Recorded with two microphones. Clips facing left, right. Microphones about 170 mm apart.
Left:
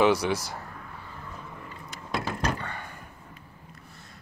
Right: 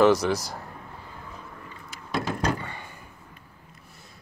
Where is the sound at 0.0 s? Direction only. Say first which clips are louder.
Right 3 dB; 10° left (ahead or behind).